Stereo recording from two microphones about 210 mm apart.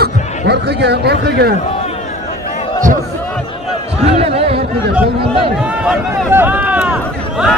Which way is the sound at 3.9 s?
30° right (ahead or behind).